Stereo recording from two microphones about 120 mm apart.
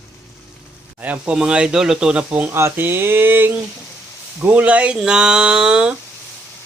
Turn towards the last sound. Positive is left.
turn(degrees=-10)  # may be behind; listen again after turning